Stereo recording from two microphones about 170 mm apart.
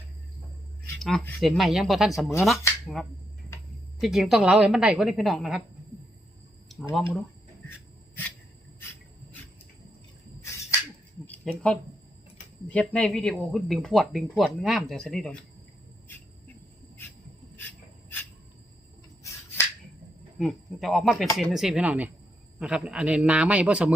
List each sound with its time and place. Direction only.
0.9 s a sound: centre (ahead or behind)
1.4 s speech: centre (ahead or behind)
4.0 s speech: centre (ahead or behind)
6.7 s speech: centre (ahead or behind)
7.7 s a sound: 10° left (ahead or behind)
11.3 s speech: 5° left (ahead or behind)
19.2 s finger snapping: 15° left (ahead or behind)
20.4 s a man's voice: centre (ahead or behind)